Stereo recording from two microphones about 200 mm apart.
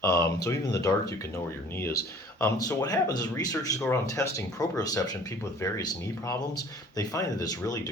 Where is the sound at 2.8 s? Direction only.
20° left (ahead or behind).